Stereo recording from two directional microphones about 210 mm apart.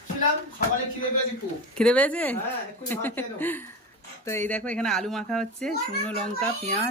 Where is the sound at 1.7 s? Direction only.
5° left (ahead or behind).